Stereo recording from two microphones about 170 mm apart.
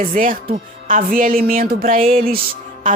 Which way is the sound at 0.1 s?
50° right (ahead or behind).